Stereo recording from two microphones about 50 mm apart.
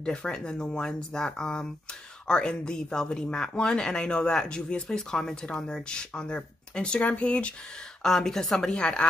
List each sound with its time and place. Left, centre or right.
0.0 s speech: centre
8.0 s speech: centre